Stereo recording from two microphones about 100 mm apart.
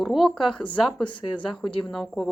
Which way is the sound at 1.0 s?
55° left (ahead or behind).